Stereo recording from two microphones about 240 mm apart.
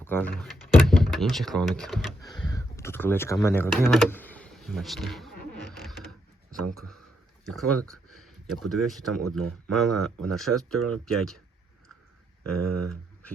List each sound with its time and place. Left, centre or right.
0.0 s speech: centre
2.2 s speech: centre
6.0 s mechanisms: centre
7.9 s a sound: centre
8.6 s speech: centre
10.8 s speech: right
11.0 s speech: centre
12.6 s speech: right